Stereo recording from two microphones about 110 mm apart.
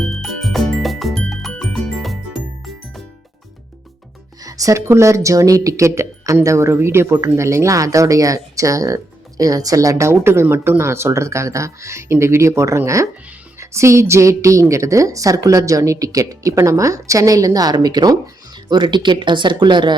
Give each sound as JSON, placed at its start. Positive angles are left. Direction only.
{"t": 0.0, "sound": "music", "side_deg": 0}
{"t": 4.4, "sound": "a woman's voice", "side_deg": -30}